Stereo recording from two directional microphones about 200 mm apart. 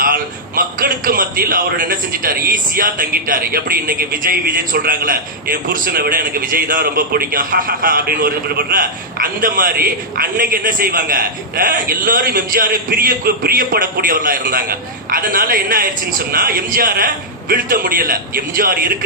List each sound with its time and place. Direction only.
0.0 s a man's voice: 45° right (ahead or behind)